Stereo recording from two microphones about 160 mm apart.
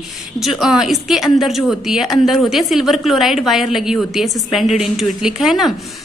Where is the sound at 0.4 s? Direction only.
Centre (ahead or behind).